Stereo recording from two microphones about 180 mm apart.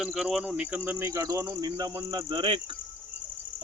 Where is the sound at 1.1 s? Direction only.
20° right (ahead or behind).